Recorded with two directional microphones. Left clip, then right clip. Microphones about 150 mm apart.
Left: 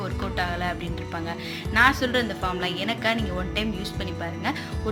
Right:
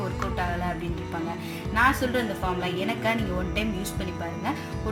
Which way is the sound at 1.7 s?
20° left (ahead or behind).